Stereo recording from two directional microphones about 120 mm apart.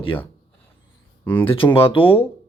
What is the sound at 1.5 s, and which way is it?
Speech, 50° left (ahead or behind).